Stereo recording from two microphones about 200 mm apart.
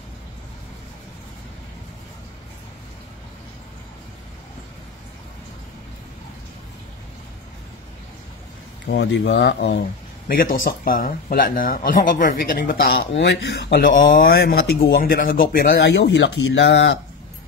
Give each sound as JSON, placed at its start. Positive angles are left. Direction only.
{"t": 8.8, "sound": "speech", "side_deg": 65}
{"t": 10.2, "sound": "speech", "side_deg": 45}
{"t": 12.8, "sound": "speech", "side_deg": 60}